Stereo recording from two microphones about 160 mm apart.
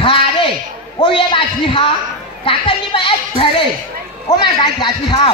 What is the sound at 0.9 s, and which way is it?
A woman's voice, 30° left (ahead or behind).